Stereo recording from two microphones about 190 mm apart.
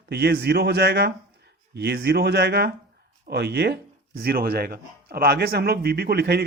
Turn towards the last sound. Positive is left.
turn(degrees=-55)  # may be behind; listen again after turning